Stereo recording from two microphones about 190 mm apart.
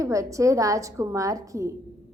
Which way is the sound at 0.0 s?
15° right (ahead or behind).